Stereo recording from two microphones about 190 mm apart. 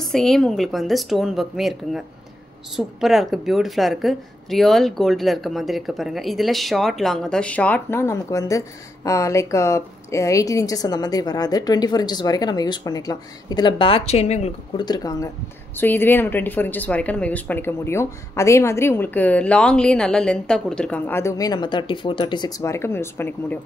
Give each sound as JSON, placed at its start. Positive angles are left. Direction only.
{"t": 0.0, "sound": "a woman's voice", "side_deg": 0}
{"t": 14.9, "sound": "a woman's voice", "side_deg": 20}